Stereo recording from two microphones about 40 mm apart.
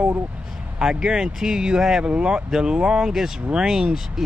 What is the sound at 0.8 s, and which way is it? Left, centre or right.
Speech, centre.